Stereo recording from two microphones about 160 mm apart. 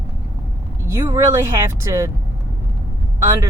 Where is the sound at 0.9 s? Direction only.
20° right (ahead or behind).